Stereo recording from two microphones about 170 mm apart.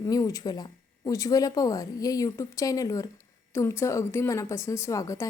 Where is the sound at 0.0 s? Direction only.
20° left (ahead or behind).